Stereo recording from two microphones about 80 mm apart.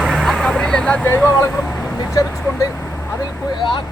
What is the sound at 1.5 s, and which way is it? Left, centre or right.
Vehicle, centre.